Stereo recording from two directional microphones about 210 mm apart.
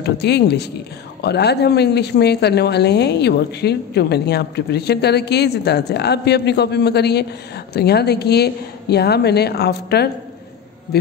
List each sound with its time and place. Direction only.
0.0 s a woman's voice: 55° left (ahead or behind)